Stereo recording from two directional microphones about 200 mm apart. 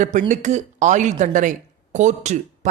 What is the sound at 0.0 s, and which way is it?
Speech, 40° right (ahead or behind).